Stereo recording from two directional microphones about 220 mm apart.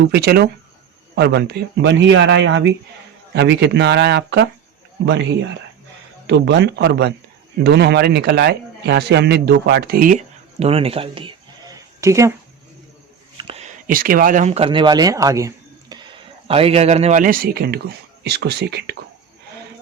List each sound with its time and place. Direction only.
0.0 s a man's voice: 45° right (ahead or behind); by 12.3 s 15° right (ahead or behind)
13.3 s a man's voice: 30° right (ahead or behind); by 18.9 s 50° right (ahead or behind)